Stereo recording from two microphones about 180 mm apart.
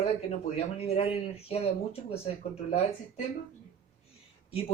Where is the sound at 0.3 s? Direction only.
35° left (ahead or behind).